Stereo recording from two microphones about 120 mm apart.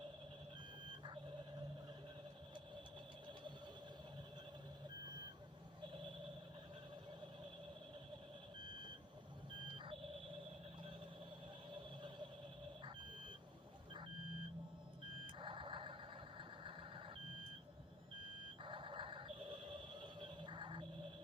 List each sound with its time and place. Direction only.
0.9 s reversing beeps: 45° right (ahead or behind)
8.6 s reversing beeps: 40° right (ahead or behind)
15.4 s vehicle: 45° right (ahead or behind)
18.2 s a sound: 45° right (ahead or behind)